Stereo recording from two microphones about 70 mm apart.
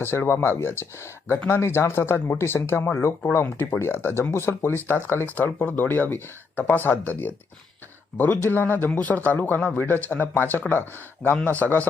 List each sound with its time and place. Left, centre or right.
0.0 s speech: left
11.2 s speech: centre